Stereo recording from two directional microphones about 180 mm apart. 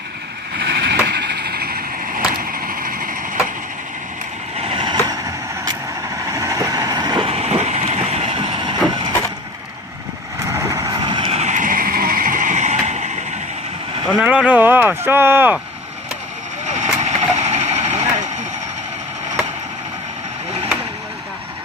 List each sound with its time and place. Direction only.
0.5 s vehicle: 70° right (ahead or behind); by 3.2 s 50° right (ahead or behind)
4.7 s vehicle: 25° right (ahead or behind)
6.2 s train: 15° right (ahead or behind)
7.3 s train: 35° right (ahead or behind)
10.5 s vehicle: 15° right (ahead or behind); by 13.1 s 40° right (ahead or behind)
14.1 s speech: 5° right (ahead or behind)
16.8 s vehicle: 40° right (ahead or behind)